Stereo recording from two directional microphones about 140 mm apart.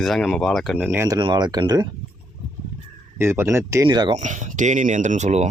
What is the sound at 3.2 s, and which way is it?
Speech, 15° right (ahead or behind).